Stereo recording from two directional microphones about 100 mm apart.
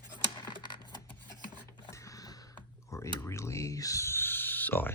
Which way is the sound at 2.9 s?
30° left (ahead or behind).